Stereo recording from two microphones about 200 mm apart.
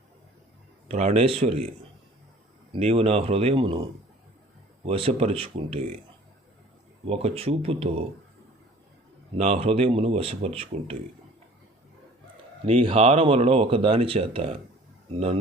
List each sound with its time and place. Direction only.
0.9 s speech: 30° right (ahead or behind)
2.7 s speech: 30° right (ahead or behind)
4.9 s speech: 30° right (ahead or behind)
7.1 s speech: 30° right (ahead or behind)
9.4 s speech: 30° right (ahead or behind)
12.6 s speech: 30° right (ahead or behind)